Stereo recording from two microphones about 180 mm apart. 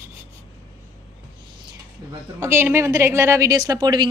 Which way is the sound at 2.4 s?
15° right (ahead or behind).